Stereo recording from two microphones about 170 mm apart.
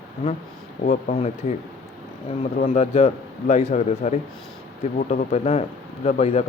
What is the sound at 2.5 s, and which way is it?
A man's voice, 50° left (ahead or behind).